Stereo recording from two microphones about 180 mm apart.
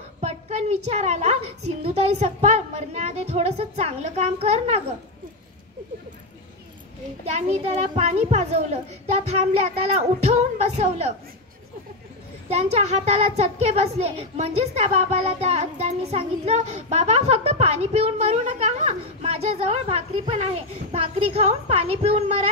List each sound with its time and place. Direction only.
0.2 s a child's voice: 35° right (ahead or behind)
7.3 s a child's voice: 35° right (ahead or behind)
9.9 s a child's voice: 40° right (ahead or behind)
12.4 s a child's voice: 35° right (ahead or behind)